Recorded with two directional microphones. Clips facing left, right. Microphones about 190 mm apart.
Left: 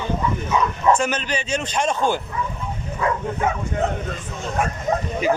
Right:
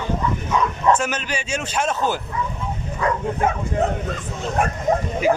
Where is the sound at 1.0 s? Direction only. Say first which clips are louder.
Left 2 dB; 5° right (ahead or behind).